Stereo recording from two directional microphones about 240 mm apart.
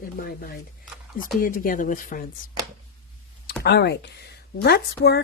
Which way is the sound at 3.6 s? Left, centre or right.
Left.